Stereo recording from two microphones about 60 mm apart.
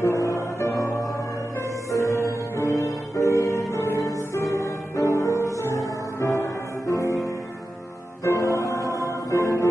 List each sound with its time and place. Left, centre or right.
0.0 s music: left
6.9 s music: left